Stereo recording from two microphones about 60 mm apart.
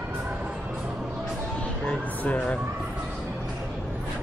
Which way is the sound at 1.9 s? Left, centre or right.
Centre.